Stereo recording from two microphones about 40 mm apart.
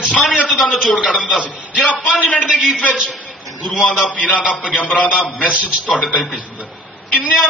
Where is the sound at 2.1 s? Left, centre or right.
Left.